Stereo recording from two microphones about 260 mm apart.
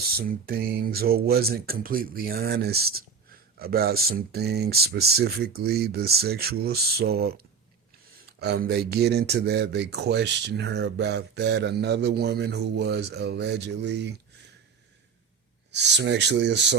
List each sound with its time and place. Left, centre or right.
0.2 s speech: right
15.7 s speech: right